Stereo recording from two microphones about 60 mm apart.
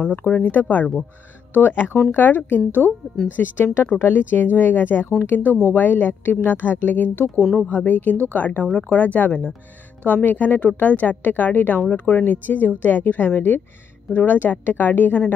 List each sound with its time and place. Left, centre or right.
0.1 s a woman's voice: left